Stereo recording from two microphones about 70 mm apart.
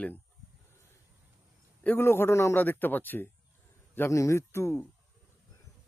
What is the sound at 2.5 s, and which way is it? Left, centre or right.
Speech, left.